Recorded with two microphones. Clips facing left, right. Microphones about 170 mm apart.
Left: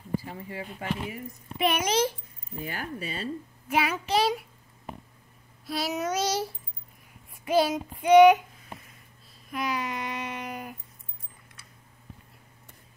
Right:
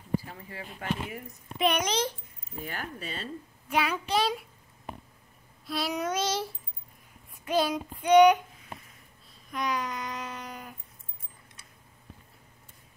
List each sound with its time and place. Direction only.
0.5 s a child's voice: 10° left (ahead or behind)
3.7 s child singing: 5° left (ahead or behind)
5.7 s child singing: 5° left (ahead or behind)
7.4 s child singing: 5° left (ahead or behind)
8.0 s a child's voice: 10° left (ahead or behind)
9.5 s a sound: 5° left (ahead or behind)